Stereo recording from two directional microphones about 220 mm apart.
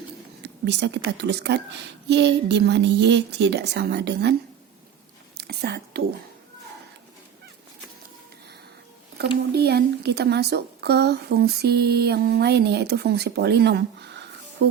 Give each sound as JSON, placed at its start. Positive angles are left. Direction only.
{"t": 0.4, "sound": "a woman's voice", "side_deg": -50}
{"t": 5.4, "sound": "whispering", "side_deg": -45}
{"t": 9.5, "sound": "a woman's voice", "side_deg": -50}